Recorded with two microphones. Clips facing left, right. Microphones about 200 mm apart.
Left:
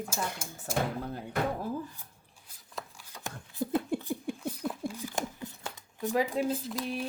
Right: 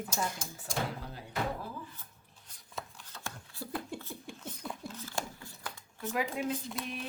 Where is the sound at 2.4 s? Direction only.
10° left (ahead or behind).